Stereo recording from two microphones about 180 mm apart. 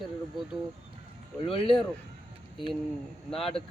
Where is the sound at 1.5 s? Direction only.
30° left (ahead or behind).